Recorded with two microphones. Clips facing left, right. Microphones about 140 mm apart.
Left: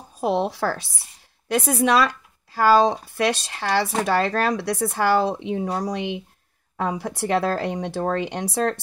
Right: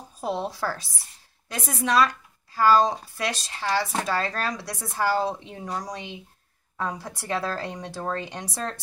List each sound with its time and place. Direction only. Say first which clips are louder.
0.2 s speech: left 6 dB; 75° left (ahead or behind)
6.8 s speech: left 6 dB; 60° left (ahead or behind)